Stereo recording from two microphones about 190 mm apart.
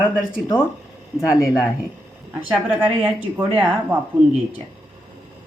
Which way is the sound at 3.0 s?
10° right (ahead or behind).